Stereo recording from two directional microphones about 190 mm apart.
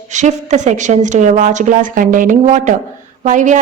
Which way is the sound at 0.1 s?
40° right (ahead or behind).